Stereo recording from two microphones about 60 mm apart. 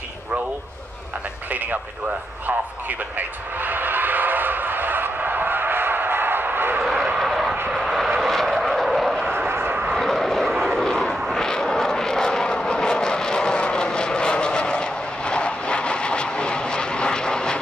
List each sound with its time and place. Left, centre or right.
2.4 s a sound: right
6.8 s vehicle: centre
9.5 s vehicle: right
9.9 s vehicle: centre